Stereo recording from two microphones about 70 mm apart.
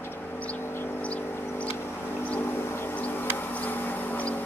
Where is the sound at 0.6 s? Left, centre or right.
Left.